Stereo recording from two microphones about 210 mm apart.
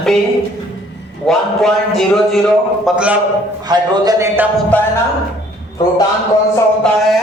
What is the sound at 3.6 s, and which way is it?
Speech, 20° right (ahead or behind).